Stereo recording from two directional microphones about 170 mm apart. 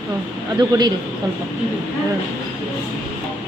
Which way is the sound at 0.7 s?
20° right (ahead or behind).